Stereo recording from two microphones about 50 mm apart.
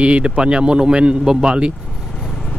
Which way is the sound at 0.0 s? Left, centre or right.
Right.